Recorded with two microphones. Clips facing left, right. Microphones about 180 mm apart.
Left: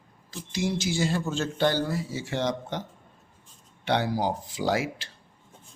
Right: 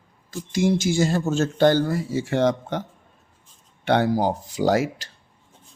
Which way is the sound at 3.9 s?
50° right (ahead or behind).